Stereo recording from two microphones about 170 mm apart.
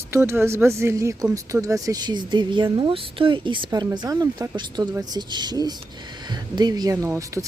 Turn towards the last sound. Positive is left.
turn(degrees=-20)  # may be behind; listen again after turning